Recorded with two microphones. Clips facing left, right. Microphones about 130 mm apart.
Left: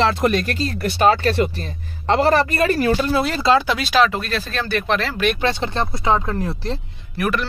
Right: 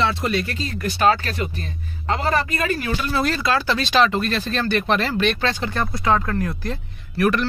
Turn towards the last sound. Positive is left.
turn(degrees=5)  # may be behind; listen again after turning